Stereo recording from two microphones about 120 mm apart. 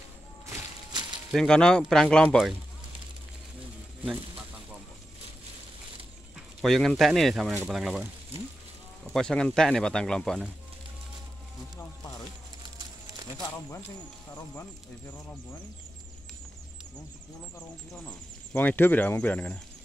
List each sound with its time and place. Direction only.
1.3 s speech: 5° left (ahead or behind)
4.0 s a sound: 5° right (ahead or behind)
6.6 s speech: centre (ahead or behind)
9.1 s speech: 5° left (ahead or behind)
14.5 s speech: 20° left (ahead or behind)
17.6 s speech: 20° left (ahead or behind)